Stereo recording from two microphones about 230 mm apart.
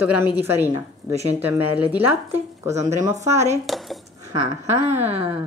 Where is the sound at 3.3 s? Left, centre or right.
Right.